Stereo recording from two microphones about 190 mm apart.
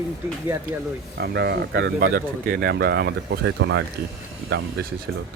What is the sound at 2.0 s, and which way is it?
Speech, 50° right (ahead or behind).